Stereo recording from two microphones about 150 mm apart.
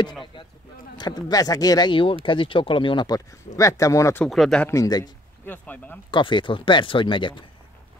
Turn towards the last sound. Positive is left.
turn(degrees=35)  # may be behind; listen again after turning